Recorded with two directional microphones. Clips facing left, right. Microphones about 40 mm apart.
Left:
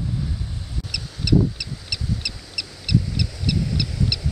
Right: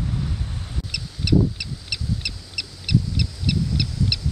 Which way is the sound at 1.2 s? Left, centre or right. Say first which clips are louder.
Even; centre.